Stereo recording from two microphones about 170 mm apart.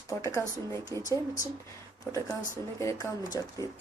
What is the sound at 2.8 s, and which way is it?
Speech, 15° left (ahead or behind).